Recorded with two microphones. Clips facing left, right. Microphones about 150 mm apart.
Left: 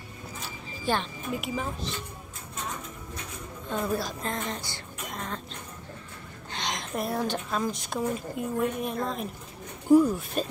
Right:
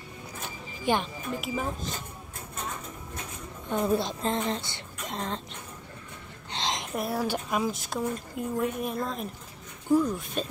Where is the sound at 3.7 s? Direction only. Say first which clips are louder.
Right 3 dB; 25° right (ahead or behind).